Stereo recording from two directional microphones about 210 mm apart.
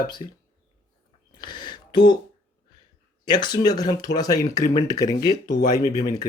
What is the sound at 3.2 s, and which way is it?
Speech, 20° left (ahead or behind).